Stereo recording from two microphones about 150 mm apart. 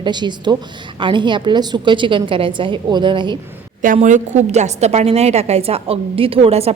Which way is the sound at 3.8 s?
55° right (ahead or behind).